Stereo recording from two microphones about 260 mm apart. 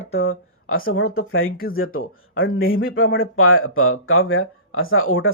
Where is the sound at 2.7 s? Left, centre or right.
Left.